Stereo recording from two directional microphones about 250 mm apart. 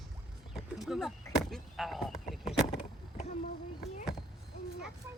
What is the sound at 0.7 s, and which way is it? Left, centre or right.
Frog, centre.